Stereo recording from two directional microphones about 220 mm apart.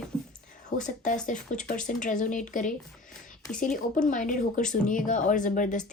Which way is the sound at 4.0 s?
35° left (ahead or behind).